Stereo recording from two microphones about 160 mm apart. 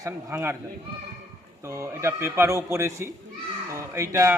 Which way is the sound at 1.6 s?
20° right (ahead or behind).